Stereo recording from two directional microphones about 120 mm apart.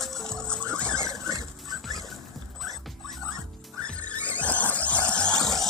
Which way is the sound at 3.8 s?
10° left (ahead or behind).